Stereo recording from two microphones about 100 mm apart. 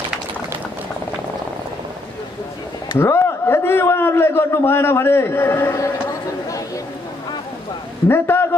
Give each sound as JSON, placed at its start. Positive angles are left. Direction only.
{"t": 3.0, "sound": "a man's voice", "side_deg": 30}
{"t": 8.1, "sound": "a man's voice", "side_deg": 25}